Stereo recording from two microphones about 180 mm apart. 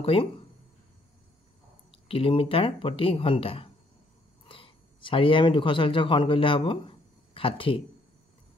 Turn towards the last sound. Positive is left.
turn(degrees=30)  # may be behind; listen again after turning